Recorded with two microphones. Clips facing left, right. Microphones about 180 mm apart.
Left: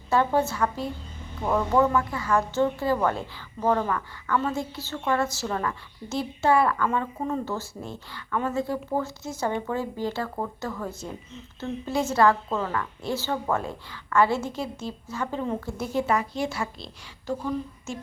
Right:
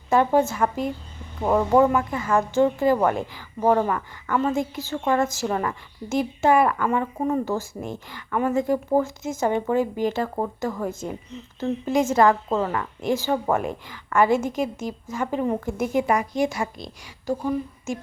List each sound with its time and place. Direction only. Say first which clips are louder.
0.1 s a woman's voice: right 4 dB; 15° right (ahead or behind)